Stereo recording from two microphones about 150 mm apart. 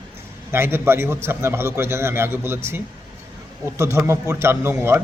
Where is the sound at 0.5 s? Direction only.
15° right (ahead or behind).